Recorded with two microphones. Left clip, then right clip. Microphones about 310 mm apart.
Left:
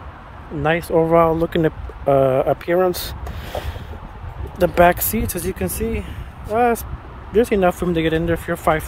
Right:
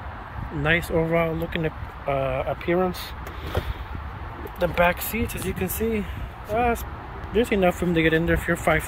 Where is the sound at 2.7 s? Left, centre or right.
Left.